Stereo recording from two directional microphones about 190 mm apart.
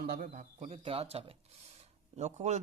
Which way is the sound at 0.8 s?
30° right (ahead or behind).